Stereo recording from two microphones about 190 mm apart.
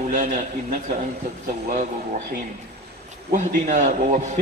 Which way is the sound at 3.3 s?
40° right (ahead or behind).